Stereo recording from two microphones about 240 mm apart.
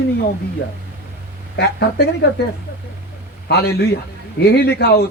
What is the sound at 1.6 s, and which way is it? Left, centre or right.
Speech, left.